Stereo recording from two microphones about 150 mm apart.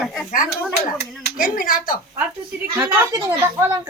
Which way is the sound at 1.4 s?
75° left (ahead or behind).